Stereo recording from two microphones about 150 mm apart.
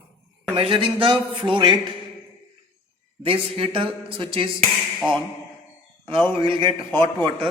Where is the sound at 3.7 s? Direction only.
35° right (ahead or behind).